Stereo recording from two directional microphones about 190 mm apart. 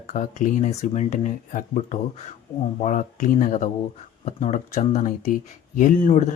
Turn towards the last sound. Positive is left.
turn(degrees=40)  # may be behind; listen again after turning